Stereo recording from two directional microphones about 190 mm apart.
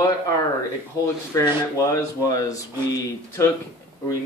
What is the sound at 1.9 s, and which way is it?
Speech, 15° left (ahead or behind).